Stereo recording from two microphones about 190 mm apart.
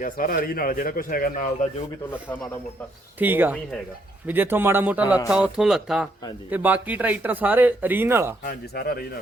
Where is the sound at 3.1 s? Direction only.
10° right (ahead or behind).